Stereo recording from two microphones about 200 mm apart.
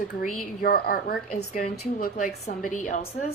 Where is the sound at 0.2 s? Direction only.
45° left (ahead or behind).